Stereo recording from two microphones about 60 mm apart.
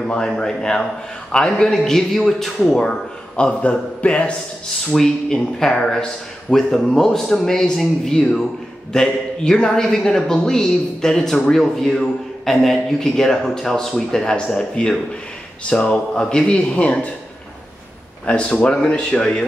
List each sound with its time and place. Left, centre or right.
0.0 s a man's voice: centre
18.2 s speech: centre